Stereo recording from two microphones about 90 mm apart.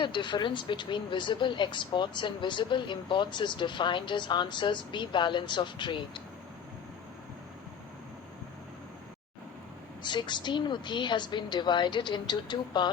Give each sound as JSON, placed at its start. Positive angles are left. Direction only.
{"t": 0.0, "sound": "speech", "side_deg": 60}
{"t": 10.0, "sound": "speech", "side_deg": 55}